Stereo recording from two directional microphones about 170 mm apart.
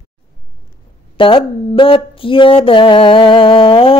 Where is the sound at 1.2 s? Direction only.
30° left (ahead or behind).